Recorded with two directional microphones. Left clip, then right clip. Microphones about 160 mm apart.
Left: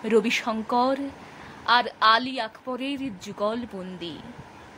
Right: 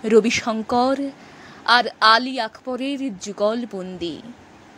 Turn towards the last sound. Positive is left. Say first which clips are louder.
# right 7 dB
turn(degrees=-30)  # may be behind; listen again after turning